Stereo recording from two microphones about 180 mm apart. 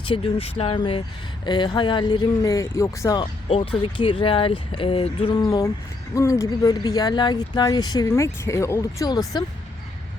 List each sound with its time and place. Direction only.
0.0 s speech: 30° left (ahead or behind)
3.5 s speech: 30° left (ahead or behind)
5.4 s speech: 15° left (ahead or behind)